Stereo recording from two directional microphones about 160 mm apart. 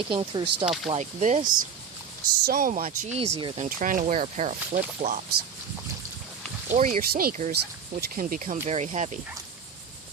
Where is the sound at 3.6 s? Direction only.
55° right (ahead or behind).